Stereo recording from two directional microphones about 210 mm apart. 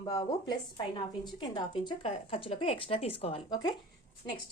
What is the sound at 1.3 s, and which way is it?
Speech, 20° left (ahead or behind).